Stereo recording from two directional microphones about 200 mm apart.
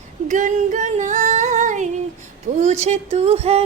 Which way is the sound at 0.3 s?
40° right (ahead or behind).